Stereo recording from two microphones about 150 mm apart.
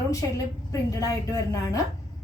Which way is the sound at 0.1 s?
20° left (ahead or behind).